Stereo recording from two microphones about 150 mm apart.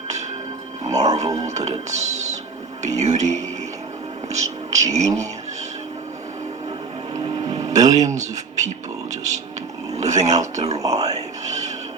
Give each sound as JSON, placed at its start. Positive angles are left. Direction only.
{"t": 0.9, "sound": "speech", "side_deg": -50}
{"t": 4.3, "sound": "a sound", "side_deg": -50}
{"t": 7.1, "sound": "vehicle", "side_deg": -25}
{"t": 7.7, "sound": "speech", "side_deg": -50}
{"t": 9.9, "sound": "speech", "side_deg": -50}
{"t": 10.8, "sound": "music", "side_deg": -45}